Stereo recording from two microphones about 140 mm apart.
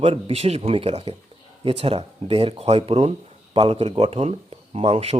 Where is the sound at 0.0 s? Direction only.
45° right (ahead or behind).